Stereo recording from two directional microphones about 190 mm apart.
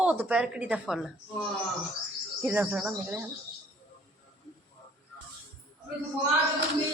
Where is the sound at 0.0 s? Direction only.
10° right (ahead or behind).